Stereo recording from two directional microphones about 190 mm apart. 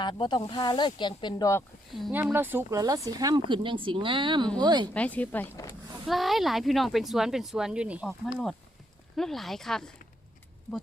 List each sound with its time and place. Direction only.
0.0 s speech: 25° left (ahead or behind)
1.9 s speech: centre (ahead or behind)
2.3 s speech: 10° right (ahead or behind)
4.9 s speech: 10° left (ahead or behind)
6.1 s speech: centre (ahead or behind)
9.1 s speech: centre (ahead or behind)